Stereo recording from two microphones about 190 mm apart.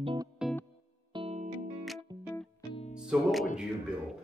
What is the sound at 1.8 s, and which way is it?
Music, centre (ahead or behind).